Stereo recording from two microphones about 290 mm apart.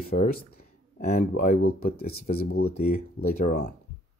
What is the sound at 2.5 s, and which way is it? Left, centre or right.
Speech, left.